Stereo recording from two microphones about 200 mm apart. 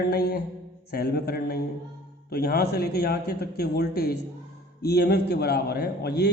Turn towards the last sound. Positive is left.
turn(degrees=55)  # may be behind; listen again after turning